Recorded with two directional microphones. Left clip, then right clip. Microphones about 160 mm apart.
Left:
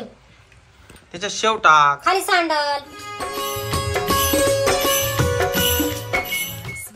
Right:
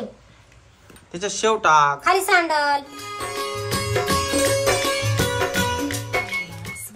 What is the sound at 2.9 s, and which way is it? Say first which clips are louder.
Music: left 1 dB; centre (ahead or behind).